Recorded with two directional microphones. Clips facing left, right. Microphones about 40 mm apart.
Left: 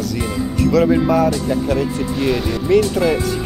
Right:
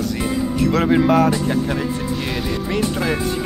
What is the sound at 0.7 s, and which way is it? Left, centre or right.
Music, right.